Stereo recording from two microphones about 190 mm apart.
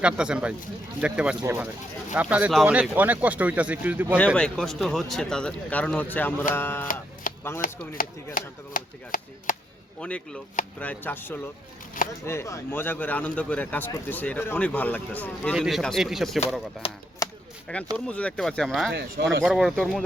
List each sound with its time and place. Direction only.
0.0 s speech: 5° right (ahead or behind)
4.4 s a man's voice: 5° left (ahead or behind)
7.3 s chop: 45° left (ahead or behind)
7.6 s a sound: 45° left (ahead or behind)
10.0 s a man's voice: 5° left (ahead or behind)
17.2 s a sound: 15° left (ahead or behind)
17.9 s speech: 5° left (ahead or behind)
18.9 s speech: 65° right (ahead or behind)
19.5 s speech: centre (ahead or behind)